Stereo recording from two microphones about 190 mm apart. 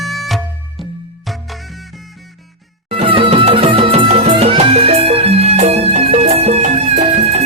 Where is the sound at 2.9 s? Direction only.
30° right (ahead or behind).